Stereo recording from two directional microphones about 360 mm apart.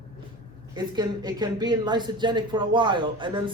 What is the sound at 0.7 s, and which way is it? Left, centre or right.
Speech, centre.